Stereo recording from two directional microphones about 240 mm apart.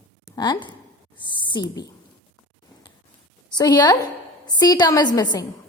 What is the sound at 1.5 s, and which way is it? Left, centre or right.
Speech, centre.